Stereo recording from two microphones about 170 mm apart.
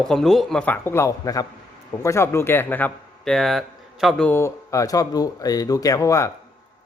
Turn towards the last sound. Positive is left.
turn(degrees=20)  # may be behind; listen again after turning